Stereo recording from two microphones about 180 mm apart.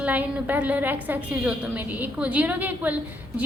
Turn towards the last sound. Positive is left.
turn(degrees=-10)  # may be behind; listen again after turning